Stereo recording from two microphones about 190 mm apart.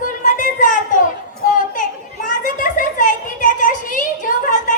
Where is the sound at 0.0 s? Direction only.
45° left (ahead or behind).